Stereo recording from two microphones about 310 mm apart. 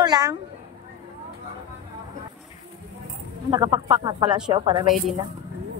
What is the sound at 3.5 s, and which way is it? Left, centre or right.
Speech, centre.